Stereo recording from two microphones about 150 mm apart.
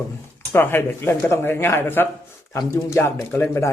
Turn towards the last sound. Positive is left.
turn(degrees=15)  # may be behind; listen again after turning